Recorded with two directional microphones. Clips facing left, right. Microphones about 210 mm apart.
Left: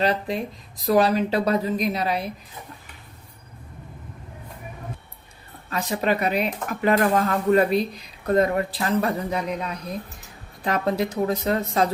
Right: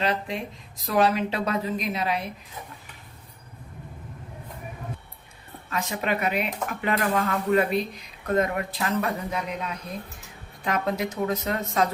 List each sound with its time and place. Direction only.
0.0 s speech: 35° left (ahead or behind)
5.7 s speech: 35° left (ahead or behind)